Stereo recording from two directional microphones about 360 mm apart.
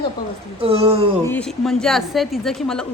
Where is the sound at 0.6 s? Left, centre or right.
Centre.